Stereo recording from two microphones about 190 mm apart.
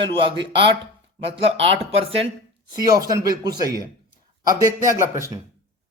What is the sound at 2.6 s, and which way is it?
Speech, 20° right (ahead or behind).